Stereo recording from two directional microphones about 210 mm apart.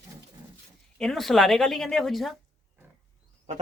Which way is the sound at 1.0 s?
Centre (ahead or behind).